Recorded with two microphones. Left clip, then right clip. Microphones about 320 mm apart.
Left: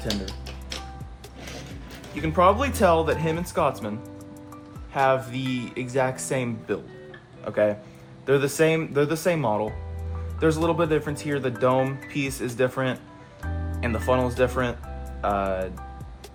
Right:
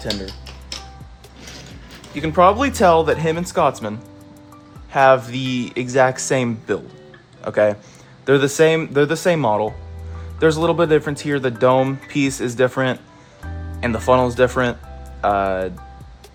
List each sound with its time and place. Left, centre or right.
2.1 s speech: right
13.4 s music: centre
13.8 s speech: right